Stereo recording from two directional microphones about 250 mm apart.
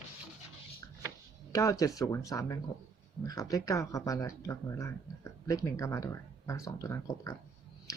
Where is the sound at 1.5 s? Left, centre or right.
Centre.